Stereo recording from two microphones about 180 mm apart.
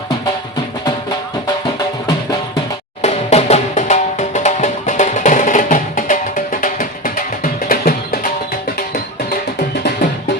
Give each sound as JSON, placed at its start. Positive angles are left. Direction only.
{"t": 3.0, "sound": "music", "side_deg": 40}